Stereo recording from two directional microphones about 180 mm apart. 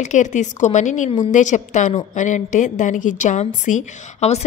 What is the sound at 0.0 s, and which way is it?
A woman's voice, 40° left (ahead or behind).